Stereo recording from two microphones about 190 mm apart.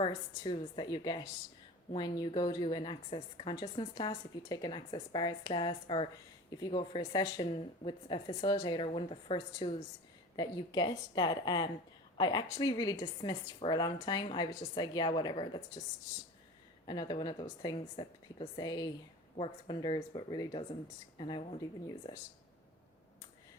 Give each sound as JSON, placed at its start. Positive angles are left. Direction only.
{"t": 0.0, "sound": "a woman's voice", "side_deg": 25}
{"t": 16.8, "sound": "a woman's voice", "side_deg": 20}